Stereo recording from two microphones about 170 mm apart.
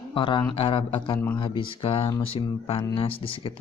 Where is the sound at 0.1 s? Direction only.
30° left (ahead or behind).